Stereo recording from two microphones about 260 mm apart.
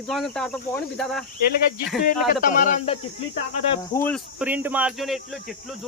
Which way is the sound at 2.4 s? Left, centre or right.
Left.